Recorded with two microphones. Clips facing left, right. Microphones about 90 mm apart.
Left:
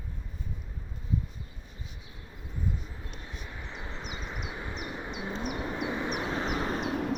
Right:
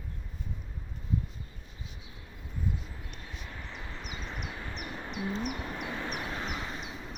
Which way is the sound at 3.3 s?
15° left (ahead or behind).